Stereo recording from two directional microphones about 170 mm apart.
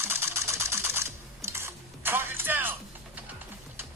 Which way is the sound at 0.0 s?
15° right (ahead or behind).